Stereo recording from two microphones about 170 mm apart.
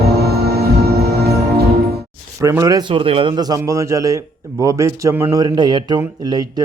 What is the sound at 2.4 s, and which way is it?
A man's voice, 20° right (ahead or behind).